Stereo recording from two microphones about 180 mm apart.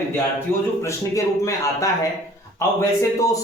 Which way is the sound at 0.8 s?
15° left (ahead or behind).